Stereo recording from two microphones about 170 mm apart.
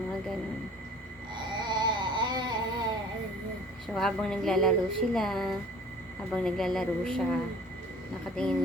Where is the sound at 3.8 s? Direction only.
Centre (ahead or behind).